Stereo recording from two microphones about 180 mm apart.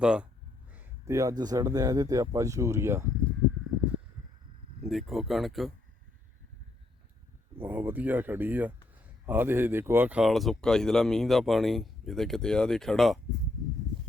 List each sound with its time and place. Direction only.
0.0 s speech: 5° right (ahead or behind)
4.8 s speech: centre (ahead or behind)
7.6 s speech: 10° right (ahead or behind)